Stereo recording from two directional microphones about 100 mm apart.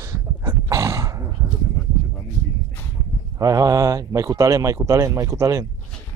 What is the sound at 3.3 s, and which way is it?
Speech, 35° right (ahead or behind).